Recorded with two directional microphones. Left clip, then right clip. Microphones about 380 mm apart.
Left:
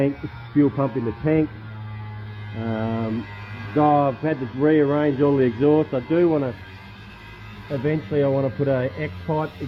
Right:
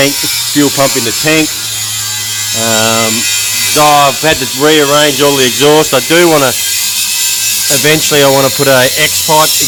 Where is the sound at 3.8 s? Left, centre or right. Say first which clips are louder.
Right 11 dB; centre.